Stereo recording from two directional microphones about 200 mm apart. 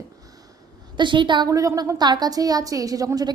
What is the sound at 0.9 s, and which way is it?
A woman's voice, 25° right (ahead or behind).